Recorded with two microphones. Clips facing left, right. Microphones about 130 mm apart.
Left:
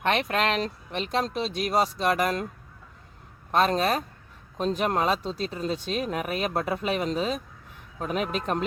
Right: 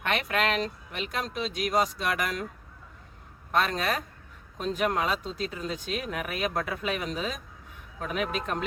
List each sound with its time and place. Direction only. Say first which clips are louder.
0.0 s speech: left 3 dB; 30° left (ahead or behind)
3.5 s speech: left 4 dB; 35° left (ahead or behind)